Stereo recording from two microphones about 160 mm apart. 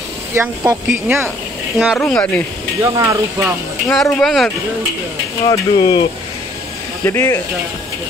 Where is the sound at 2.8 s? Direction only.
20° right (ahead or behind).